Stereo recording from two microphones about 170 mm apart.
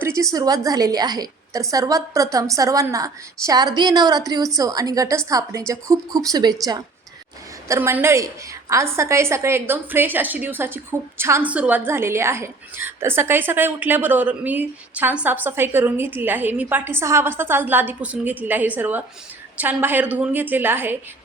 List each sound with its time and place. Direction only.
0.0 s a woman's voice: 20° right (ahead or behind)